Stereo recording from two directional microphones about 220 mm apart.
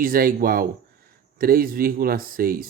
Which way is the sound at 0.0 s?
40° right (ahead or behind).